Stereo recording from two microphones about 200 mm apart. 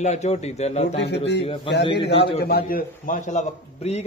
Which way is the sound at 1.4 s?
30° left (ahead or behind).